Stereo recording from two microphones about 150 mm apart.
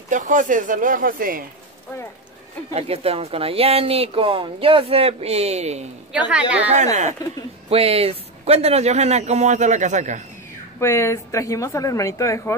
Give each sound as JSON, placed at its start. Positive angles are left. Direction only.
{"t": 0.1, "sound": "speech", "side_deg": -60}
{"t": 2.7, "sound": "speech", "side_deg": -40}
{"t": 6.1, "sound": "a woman's voice", "side_deg": -10}
{"t": 6.8, "sound": "speech", "side_deg": -50}
{"t": 7.7, "sound": "speech", "side_deg": -40}
{"t": 10.8, "sound": "a woman's voice", "side_deg": 15}